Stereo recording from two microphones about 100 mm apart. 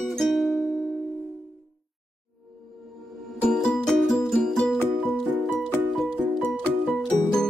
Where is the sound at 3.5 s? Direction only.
5° left (ahead or behind).